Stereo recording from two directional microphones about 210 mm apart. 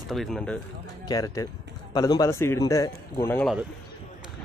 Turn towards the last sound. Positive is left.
turn(degrees=10)  # may be behind; listen again after turning